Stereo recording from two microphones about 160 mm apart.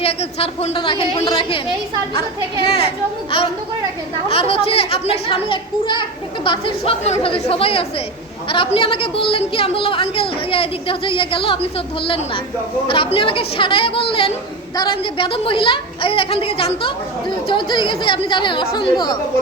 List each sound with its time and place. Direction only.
0.0 s a woman's voice: 35° left (ahead or behind)
2.6 s a woman's voice: 35° left (ahead or behind)
4.3 s a woman's voice: 35° left (ahead or behind)